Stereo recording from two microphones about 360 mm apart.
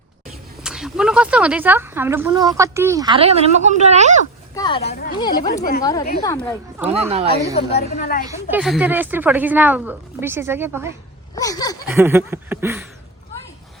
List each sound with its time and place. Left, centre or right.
0.6 s speech: centre
4.5 s a woman's voice: centre
5.8 s speech: centre
6.9 s speech: centre
7.5 s a woman's voice: centre
8.2 s speech: centre
11.3 s speech: centre
11.9 s a sound: centre